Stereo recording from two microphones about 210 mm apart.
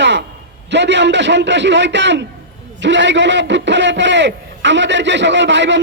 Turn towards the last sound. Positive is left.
turn(degrees=-55)  # may be behind; listen again after turning